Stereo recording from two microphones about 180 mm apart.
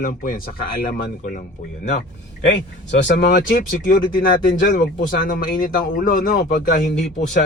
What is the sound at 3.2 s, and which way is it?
Speech, 65° left (ahead or behind).